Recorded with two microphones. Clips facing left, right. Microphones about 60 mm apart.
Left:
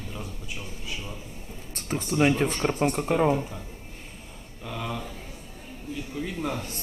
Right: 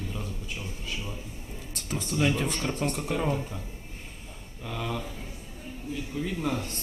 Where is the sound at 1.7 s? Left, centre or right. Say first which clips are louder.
Left 4 dB; left; by 3.5 s centre.